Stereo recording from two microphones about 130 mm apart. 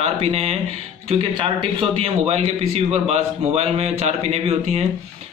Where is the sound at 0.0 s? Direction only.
50° right (ahead or behind).